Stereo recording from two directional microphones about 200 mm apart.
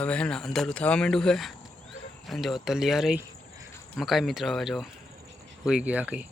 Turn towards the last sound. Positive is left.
turn(degrees=-5)  # may be behind; listen again after turning